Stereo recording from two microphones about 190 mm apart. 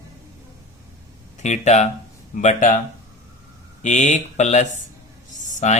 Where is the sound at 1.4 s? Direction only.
40° left (ahead or behind).